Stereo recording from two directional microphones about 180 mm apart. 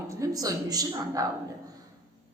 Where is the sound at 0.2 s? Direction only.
20° right (ahead or behind).